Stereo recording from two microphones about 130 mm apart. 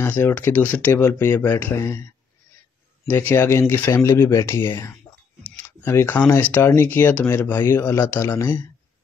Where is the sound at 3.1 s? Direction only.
15° left (ahead or behind).